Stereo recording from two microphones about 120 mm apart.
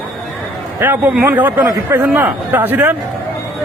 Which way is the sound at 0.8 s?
15° right (ahead or behind).